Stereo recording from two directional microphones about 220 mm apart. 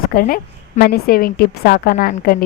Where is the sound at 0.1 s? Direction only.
40° left (ahead or behind).